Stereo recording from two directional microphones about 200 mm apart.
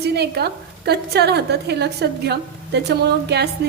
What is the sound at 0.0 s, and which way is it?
A woman's voice, 55° right (ahead or behind).